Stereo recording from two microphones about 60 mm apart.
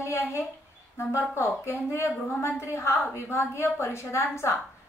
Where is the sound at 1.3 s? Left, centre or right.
Left.